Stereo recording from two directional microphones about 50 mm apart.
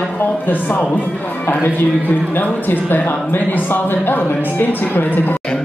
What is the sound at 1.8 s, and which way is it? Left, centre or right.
Speech, left.